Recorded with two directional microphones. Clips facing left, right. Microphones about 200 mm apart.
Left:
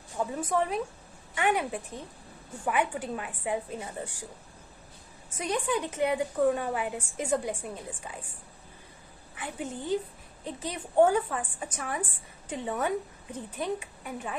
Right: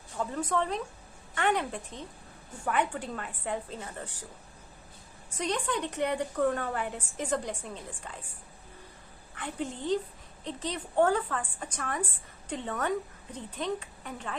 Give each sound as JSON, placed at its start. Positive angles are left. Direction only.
{"t": 0.2, "sound": "a woman's voice", "side_deg": 15}
{"t": 5.4, "sound": "a woman's voice", "side_deg": 10}
{"t": 9.3, "sound": "a woman's voice", "side_deg": 5}